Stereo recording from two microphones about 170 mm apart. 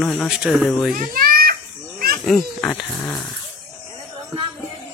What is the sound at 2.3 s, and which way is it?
Speech, centre (ahead or behind).